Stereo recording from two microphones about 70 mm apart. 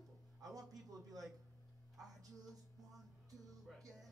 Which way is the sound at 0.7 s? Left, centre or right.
Right.